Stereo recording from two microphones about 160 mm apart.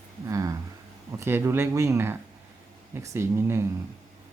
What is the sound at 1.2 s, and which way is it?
Speech, 15° right (ahead or behind).